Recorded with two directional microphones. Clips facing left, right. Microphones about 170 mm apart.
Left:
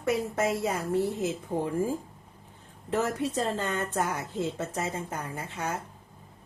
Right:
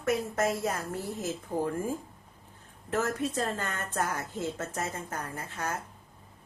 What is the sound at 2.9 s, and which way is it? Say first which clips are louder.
A woman's voice: left 2 dB; 20° left (ahead or behind).